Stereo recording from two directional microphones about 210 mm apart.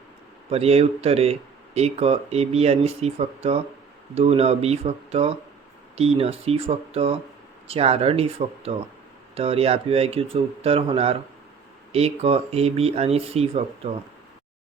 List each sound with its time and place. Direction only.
0.5 s speech: 30° right (ahead or behind)